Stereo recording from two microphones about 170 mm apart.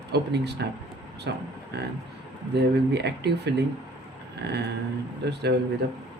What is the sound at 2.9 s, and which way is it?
Speech, 80° right.